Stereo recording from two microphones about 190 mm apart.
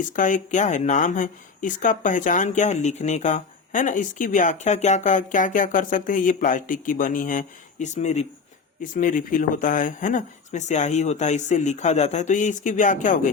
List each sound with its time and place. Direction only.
0.0 s speech: 45° left (ahead or behind)